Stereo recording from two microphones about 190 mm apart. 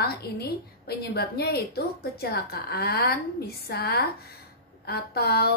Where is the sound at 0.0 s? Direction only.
55° left (ahead or behind).